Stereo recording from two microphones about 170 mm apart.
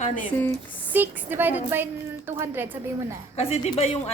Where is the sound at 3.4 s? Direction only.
35° left (ahead or behind).